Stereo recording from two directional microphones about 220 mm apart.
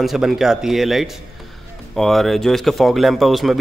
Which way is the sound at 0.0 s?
Centre (ahead or behind).